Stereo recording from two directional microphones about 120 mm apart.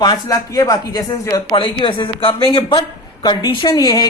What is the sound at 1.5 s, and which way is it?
Speech, 45° left (ahead or behind).